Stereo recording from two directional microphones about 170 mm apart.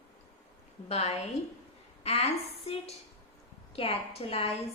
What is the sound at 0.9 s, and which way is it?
A woman's voice, 40° left (ahead or behind).